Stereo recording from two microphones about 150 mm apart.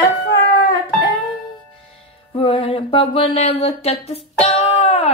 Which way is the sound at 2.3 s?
40° left (ahead or behind).